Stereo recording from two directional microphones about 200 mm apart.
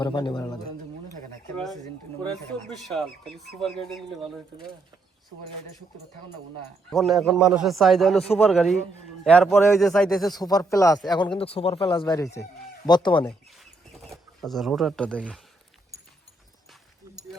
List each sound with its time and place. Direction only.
0.0 s speech: 25° left (ahead or behind)
1.5 s speech: centre (ahead or behind)
6.9 s speech: centre (ahead or behind)
10.3 s speech: 20° left (ahead or behind)
13.2 s bird: centre (ahead or behind)